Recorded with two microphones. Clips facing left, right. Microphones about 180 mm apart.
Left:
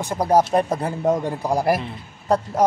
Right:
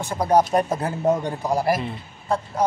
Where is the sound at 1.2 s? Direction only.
10° left (ahead or behind).